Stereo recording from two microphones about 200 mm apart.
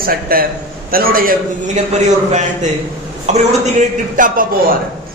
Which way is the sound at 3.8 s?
40° right (ahead or behind).